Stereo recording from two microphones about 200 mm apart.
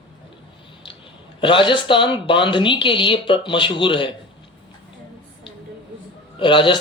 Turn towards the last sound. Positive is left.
turn(degrees=25)  # may be behind; listen again after turning